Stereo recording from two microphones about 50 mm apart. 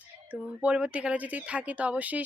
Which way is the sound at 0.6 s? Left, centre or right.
Right.